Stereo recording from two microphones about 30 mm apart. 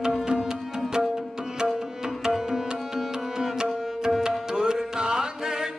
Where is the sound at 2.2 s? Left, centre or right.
Centre.